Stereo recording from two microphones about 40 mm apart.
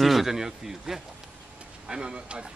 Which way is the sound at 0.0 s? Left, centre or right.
Centre.